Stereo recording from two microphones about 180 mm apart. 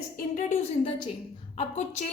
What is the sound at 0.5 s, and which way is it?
A woman's voice, 30° left (ahead or behind).